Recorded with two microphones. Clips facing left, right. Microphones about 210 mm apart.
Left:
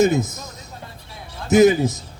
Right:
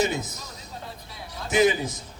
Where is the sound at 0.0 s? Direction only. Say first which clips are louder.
Left 9 dB; 45° left (ahead or behind).